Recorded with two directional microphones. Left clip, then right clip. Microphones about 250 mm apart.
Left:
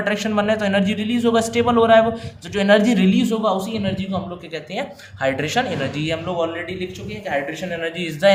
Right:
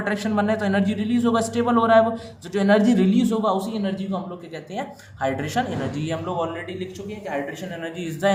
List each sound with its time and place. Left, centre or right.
0.0 s a man's voice: left